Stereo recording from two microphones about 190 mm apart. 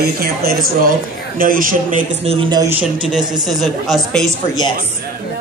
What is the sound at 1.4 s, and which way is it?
Speech, 50° right (ahead or behind).